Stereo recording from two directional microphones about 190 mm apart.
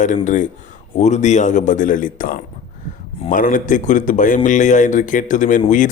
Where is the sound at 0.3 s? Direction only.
40° left (ahead or behind).